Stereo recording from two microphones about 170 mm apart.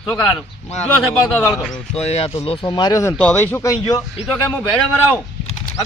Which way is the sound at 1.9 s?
40° left (ahead or behind).